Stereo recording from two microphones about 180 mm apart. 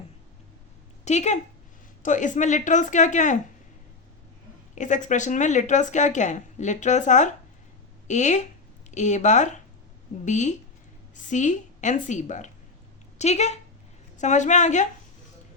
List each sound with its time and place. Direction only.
1.0 s a woman's voice: 40° left (ahead or behind)
4.7 s a woman's voice: 45° left (ahead or behind)